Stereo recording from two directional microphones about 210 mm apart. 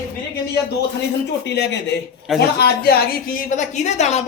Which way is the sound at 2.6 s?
50° left (ahead or behind).